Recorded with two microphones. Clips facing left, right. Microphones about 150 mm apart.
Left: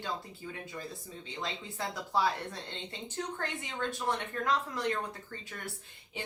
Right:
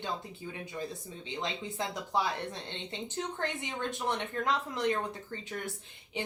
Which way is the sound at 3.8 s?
20° right (ahead or behind).